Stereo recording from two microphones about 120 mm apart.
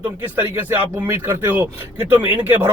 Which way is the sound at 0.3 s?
20° right (ahead or behind).